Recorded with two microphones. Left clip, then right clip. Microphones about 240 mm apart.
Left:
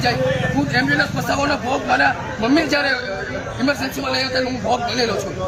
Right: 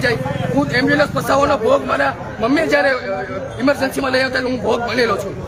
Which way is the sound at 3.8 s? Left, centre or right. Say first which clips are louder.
Right 5 dB; right.